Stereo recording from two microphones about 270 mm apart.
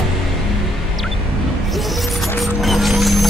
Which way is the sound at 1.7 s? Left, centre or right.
Centre.